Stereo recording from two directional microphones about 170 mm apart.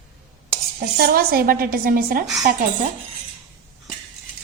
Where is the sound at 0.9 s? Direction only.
60° right (ahead or behind).